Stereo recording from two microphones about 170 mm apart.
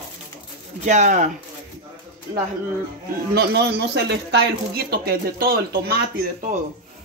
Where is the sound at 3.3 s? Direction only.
70° right (ahead or behind).